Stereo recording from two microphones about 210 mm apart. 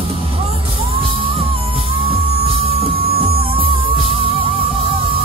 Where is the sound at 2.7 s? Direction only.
25° right (ahead or behind).